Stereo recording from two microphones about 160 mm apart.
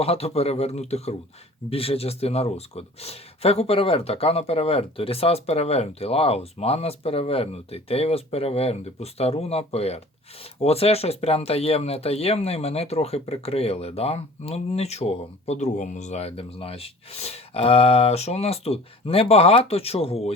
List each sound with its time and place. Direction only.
0.0 s speech: 40° left (ahead or behind)